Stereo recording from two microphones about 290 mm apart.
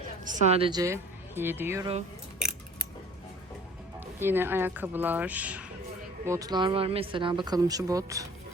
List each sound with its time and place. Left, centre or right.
0.3 s speech: right; by 1.9 s centre
4.2 s speech: centre